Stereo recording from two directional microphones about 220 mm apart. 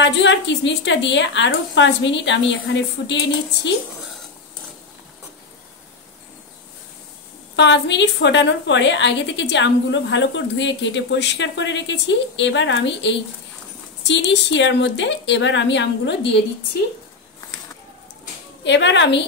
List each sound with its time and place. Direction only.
0.0 s a woman's voice: 55° left (ahead or behind)
7.5 s a woman's voice: 55° left (ahead or behind)
18.6 s a woman's voice: 55° left (ahead or behind)